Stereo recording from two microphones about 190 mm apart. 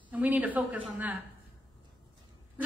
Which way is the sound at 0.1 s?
10° right (ahead or behind).